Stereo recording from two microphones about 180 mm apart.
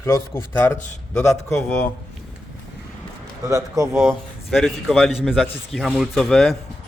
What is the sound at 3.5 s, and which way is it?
Speech, 15° right (ahead or behind).